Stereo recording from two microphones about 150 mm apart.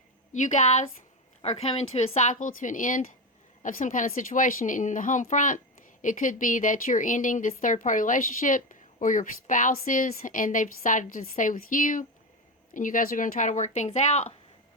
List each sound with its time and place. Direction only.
0.3 s a woman's voice: 55° left (ahead or behind)